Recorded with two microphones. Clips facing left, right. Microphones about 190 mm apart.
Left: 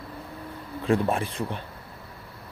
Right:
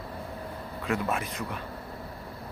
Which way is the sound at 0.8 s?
30° left (ahead or behind).